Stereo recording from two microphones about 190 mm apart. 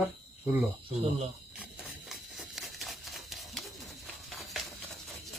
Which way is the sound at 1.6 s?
Centre (ahead or behind).